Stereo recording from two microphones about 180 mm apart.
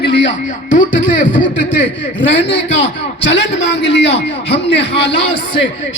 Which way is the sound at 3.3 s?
80° left.